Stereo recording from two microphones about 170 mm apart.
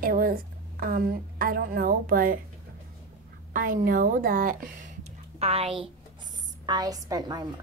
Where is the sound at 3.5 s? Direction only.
50° right (ahead or behind).